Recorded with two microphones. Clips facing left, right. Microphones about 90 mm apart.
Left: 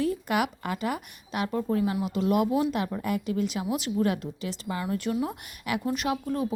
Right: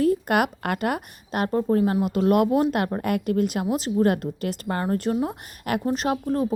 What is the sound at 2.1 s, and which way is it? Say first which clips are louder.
Speech: right 5 dB; 55° right (ahead or behind).